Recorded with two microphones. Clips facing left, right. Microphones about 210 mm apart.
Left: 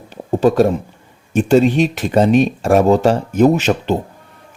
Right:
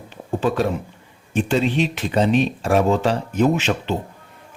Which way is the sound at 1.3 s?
45° left (ahead or behind).